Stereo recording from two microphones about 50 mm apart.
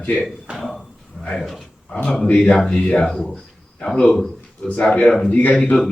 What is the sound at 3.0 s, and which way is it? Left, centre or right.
A man's voice, centre.